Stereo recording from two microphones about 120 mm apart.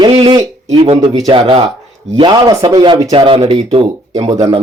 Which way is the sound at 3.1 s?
50° right (ahead or behind).